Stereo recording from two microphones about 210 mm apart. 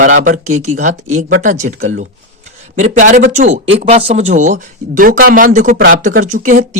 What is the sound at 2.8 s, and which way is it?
Speech, 35° right (ahead or behind).